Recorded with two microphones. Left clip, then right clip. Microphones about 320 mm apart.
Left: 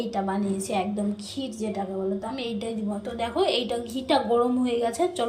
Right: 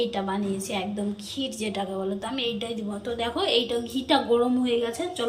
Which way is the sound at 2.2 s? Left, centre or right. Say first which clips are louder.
Right 2 dB; centre.